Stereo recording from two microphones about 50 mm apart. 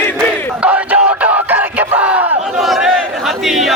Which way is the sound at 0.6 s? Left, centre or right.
Right.